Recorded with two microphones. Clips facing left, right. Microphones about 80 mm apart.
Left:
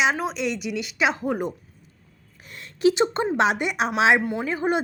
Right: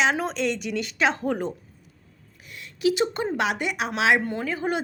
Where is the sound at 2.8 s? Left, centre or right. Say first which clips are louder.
Left 3 dB; left.